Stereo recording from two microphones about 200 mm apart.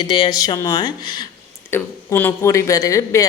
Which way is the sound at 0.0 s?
20° left (ahead or behind).